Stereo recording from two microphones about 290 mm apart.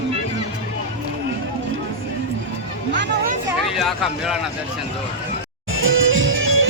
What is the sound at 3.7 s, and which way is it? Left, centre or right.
Speech, centre.